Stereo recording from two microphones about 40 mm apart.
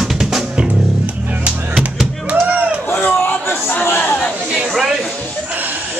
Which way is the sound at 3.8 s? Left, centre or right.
Left.